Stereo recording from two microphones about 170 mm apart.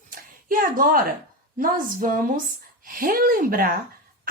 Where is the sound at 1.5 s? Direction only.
55° right (ahead or behind).